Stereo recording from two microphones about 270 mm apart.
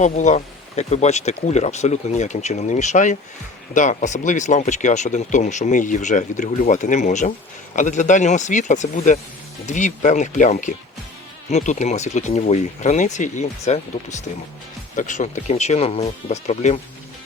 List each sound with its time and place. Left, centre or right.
0.0 s speech: left